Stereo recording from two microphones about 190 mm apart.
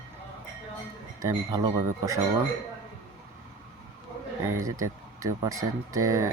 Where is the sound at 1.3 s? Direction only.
20° right (ahead or behind).